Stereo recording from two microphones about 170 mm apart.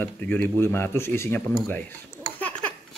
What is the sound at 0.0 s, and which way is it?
Speech, 10° left (ahead or behind).